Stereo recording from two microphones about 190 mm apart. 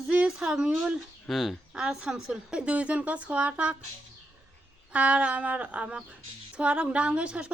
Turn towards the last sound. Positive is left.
turn(degrees=-5)  # may be behind; listen again after turning